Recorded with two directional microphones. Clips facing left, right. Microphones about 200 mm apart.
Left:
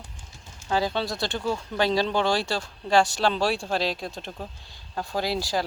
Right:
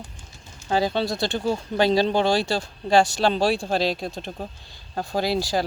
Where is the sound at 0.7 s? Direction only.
25° right (ahead or behind).